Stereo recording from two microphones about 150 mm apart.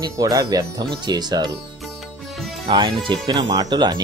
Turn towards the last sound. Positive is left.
turn(degrees=-30)  # may be behind; listen again after turning